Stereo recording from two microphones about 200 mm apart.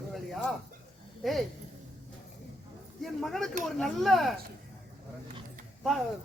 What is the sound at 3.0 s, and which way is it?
Speech, centre (ahead or behind).